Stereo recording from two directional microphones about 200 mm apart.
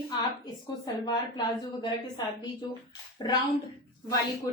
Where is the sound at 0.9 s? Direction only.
20° left (ahead or behind).